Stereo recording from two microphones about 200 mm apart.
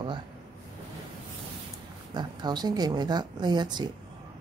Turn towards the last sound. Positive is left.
turn(degrees=-20)  # may be behind; listen again after turning